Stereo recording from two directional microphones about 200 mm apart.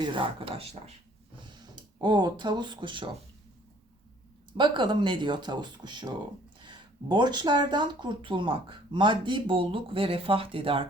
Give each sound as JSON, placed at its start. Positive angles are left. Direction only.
{"t": 0.0, "sound": "speech", "side_deg": -25}
{"t": 4.5, "sound": "speech", "side_deg": -25}